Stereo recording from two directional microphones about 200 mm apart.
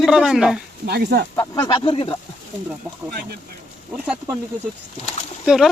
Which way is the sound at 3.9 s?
5° right (ahead or behind).